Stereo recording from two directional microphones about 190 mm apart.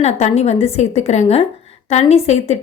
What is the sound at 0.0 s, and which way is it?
Speech, 35° left (ahead or behind).